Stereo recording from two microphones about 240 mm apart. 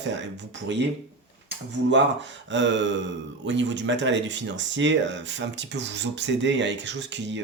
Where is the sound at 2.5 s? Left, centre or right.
Right.